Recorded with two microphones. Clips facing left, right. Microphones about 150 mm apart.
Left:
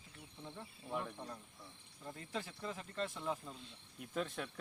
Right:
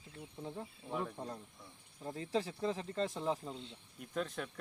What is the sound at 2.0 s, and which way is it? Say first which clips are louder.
Speech: right 8 dB; 30° right (ahead or behind).